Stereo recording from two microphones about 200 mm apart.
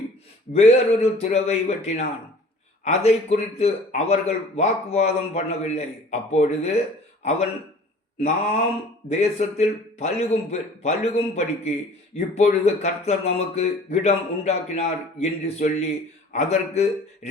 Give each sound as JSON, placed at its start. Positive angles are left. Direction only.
{"t": 0.5, "sound": "a man's voice", "side_deg": 35}
{"t": 9.0, "sound": "a man's voice", "side_deg": 35}